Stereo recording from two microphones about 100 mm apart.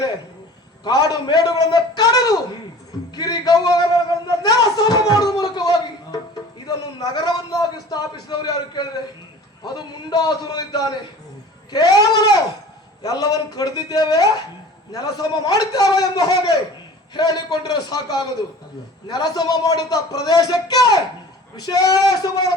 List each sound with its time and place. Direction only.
0.9 s a man's voice: 40° left (ahead or behind)
4.3 s a sound: 40° left (ahead or behind)
6.7 s a man's voice: 40° left (ahead or behind)